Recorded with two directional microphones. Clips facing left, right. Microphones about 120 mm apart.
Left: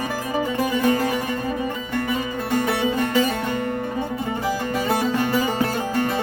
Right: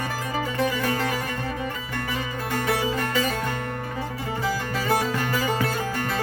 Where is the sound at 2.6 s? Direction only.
25° left (ahead or behind).